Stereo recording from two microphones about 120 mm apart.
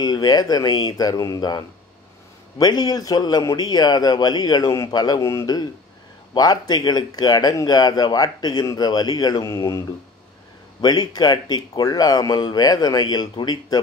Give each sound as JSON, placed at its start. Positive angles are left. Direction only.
{"t": 0.0, "sound": "speech", "side_deg": 35}
{"t": 10.8, "sound": "speech", "side_deg": 35}